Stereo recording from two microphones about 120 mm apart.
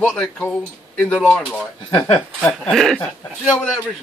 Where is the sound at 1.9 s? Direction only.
50° left (ahead or behind).